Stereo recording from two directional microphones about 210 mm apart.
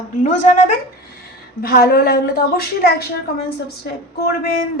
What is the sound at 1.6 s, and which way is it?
A woman's voice, 45° left (ahead or behind).